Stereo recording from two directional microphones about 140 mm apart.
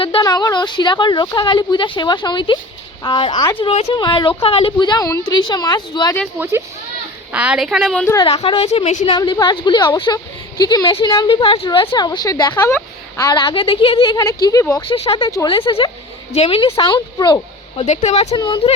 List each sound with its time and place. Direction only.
0.2 s a woman's voice: 25° left (ahead or behind); by 3.8 s 45° left (ahead or behind)
3.8 s a woman's voice: 35° left (ahead or behind)
7.3 s a woman's voice: 5° right (ahead or behind)
8.3 s a woman's voice: 45° left (ahead or behind)
9.1 s a woman's voice: 30° left (ahead or behind)
14.4 s speech: 25° left (ahead or behind)
14.8 s a woman's voice: 45° left (ahead or behind)
17.7 s a woman's voice: 50° left (ahead or behind)
18.3 s a woman's voice: 35° left (ahead or behind)